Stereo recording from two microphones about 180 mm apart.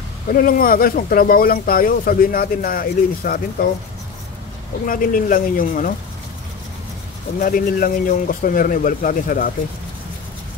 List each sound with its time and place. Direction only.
0.3 s speech: 50° left (ahead or behind)
4.8 s speech: 50° left (ahead or behind)
7.3 s speech: 50° left (ahead or behind)